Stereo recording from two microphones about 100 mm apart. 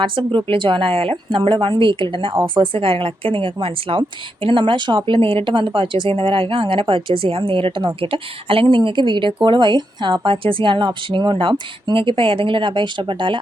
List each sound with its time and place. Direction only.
0.0 s a woman's voice: 55° right (ahead or behind)
1.4 s speech: 45° right (ahead or behind)
1.6 s a woman's voice: 55° right (ahead or behind)
11.3 s a woman's voice: 65° right (ahead or behind)